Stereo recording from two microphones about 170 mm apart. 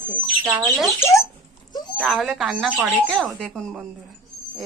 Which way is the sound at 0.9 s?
15° left (ahead or behind).